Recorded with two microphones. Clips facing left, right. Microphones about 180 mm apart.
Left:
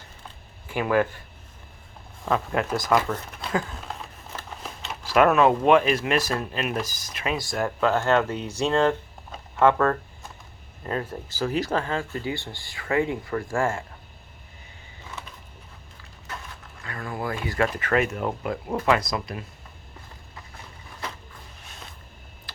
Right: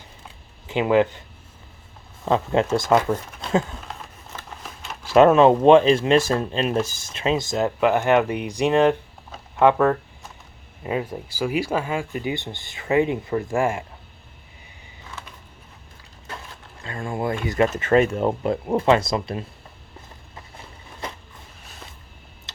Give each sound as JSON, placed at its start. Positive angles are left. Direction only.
{"t": 0.7, "sound": "speech", "side_deg": -20}
{"t": 2.2, "sound": "speech", "side_deg": -25}
{"t": 5.1, "sound": "speech", "side_deg": -25}
{"t": 16.8, "sound": "speech", "side_deg": -25}
{"t": 22.5, "sound": "a sound", "side_deg": -20}